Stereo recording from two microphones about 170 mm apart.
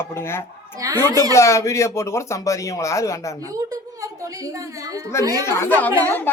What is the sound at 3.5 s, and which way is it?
A woman's voice, 20° right (ahead or behind).